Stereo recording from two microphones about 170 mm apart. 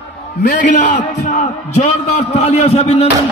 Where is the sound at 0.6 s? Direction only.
50° left (ahead or behind).